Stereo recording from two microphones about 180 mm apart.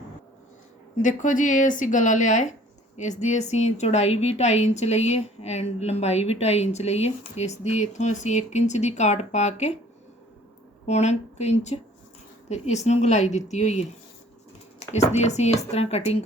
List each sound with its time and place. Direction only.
0.9 s a woman's voice: 45° left (ahead or behind)
10.8 s a woman's voice: 40° left (ahead or behind)